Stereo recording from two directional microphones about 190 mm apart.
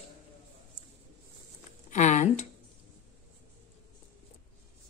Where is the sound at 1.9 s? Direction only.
40° left (ahead or behind).